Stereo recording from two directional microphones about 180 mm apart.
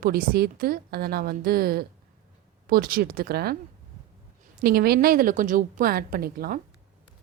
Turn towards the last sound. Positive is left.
turn(degrees=-55)  # may be behind; listen again after turning